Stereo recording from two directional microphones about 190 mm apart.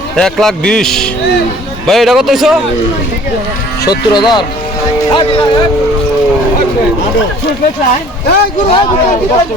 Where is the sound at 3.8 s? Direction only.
20° left (ahead or behind).